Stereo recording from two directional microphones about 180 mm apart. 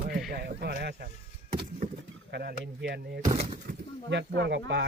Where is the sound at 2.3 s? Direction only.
65° right (ahead or behind).